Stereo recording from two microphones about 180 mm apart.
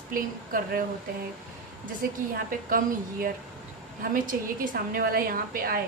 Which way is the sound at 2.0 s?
50° right (ahead or behind).